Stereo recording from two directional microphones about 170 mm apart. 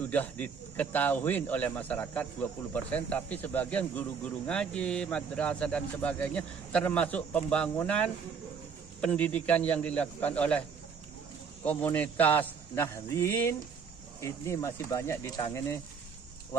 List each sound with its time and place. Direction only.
0.0 s speech: 10° left (ahead or behind)
11.6 s speech: 10° left (ahead or behind)